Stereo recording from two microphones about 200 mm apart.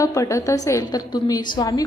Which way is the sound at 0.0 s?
15° left (ahead or behind).